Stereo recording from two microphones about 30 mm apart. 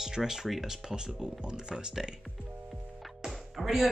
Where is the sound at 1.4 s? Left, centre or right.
Right.